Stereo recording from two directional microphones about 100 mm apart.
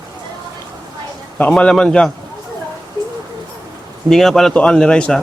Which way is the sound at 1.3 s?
10° left (ahead or behind).